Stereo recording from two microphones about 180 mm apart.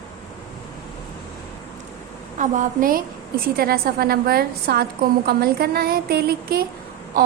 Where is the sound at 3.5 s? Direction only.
60° right (ahead or behind).